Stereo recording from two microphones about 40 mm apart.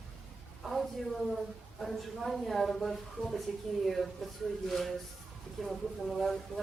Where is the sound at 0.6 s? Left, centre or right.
Centre.